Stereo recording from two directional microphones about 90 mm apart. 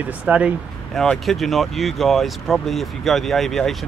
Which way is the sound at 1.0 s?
Centre (ahead or behind).